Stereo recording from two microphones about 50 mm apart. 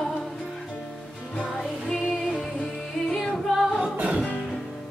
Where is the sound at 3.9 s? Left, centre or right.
Right.